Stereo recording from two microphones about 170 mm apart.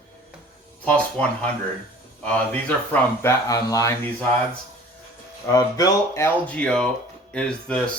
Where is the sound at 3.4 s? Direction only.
20° left (ahead or behind).